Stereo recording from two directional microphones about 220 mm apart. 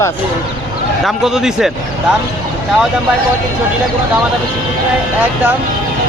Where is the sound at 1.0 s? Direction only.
Centre (ahead or behind).